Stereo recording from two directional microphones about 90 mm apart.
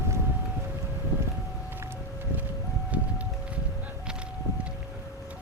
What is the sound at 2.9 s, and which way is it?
Music, 15° right (ahead or behind).